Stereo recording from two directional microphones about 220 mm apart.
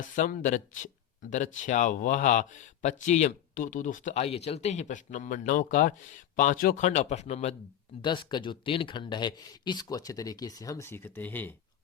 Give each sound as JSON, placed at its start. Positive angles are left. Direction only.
{"t": 0.0, "sound": "speech", "side_deg": 40}